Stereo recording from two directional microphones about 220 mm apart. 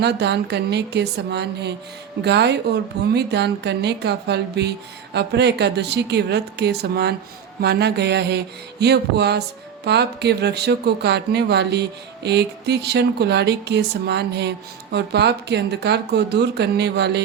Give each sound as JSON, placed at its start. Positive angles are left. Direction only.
{"t": 0.0, "sound": "speech", "side_deg": -50}